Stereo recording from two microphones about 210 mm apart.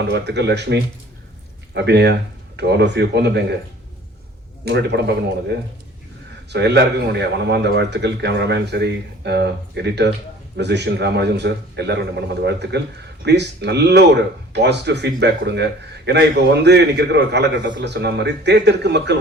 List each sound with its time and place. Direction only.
0.0 s speech: 55° right (ahead or behind)
4.6 s speech: 55° right (ahead or behind)